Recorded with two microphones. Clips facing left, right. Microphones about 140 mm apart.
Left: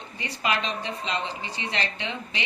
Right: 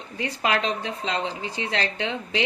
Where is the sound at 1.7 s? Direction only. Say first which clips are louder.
Right 4 dB; 90° right.